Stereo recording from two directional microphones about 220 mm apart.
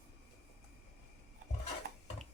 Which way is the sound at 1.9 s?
40° right (ahead or behind).